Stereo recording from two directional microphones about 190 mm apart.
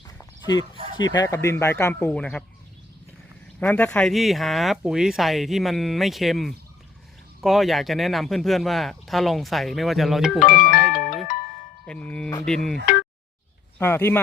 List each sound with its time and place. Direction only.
0.4 s speech: 20° left (ahead or behind)
3.6 s speech: 5° left (ahead or behind)
10.5 s music: 45° left (ahead or behind)
11.9 s speech: 5° left (ahead or behind)
13.7 s speech: 10° left (ahead or behind)